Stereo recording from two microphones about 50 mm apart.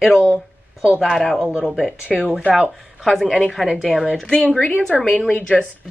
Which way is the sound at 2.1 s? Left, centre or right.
Centre.